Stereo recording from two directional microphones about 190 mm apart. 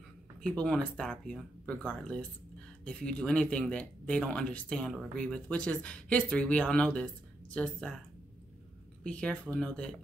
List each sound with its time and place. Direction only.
0.4 s speech: 5° left (ahead or behind)
9.0 s speech: 5° left (ahead or behind)